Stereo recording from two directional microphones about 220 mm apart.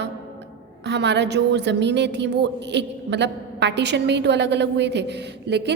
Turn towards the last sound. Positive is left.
turn(degrees=-50)  # may be behind; listen again after turning